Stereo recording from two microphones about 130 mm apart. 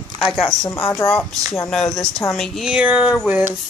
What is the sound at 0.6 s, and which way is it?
Speech, 20° left (ahead or behind).